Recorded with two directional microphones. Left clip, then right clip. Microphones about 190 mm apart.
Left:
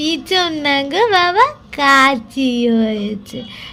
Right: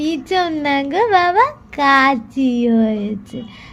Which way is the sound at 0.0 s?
15° right (ahead or behind).